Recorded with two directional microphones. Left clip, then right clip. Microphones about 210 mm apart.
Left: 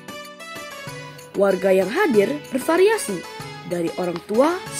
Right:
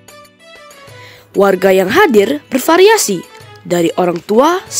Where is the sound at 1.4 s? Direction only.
45° right (ahead or behind).